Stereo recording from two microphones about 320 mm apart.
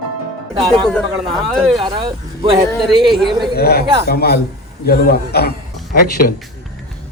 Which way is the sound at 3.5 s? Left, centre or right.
Left.